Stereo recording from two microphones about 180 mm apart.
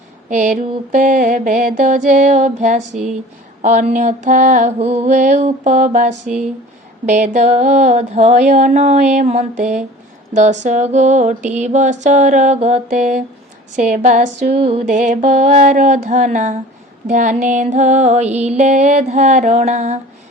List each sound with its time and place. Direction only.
0.3 s music: 45° right (ahead or behind)